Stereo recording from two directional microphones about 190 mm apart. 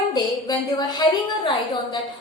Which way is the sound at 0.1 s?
20° left (ahead or behind).